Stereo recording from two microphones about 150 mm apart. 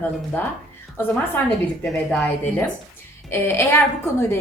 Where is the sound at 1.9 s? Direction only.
10° left (ahead or behind).